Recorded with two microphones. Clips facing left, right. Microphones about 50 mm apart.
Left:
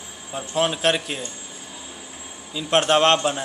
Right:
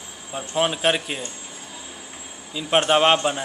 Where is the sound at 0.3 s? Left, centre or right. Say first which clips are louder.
Even; centre.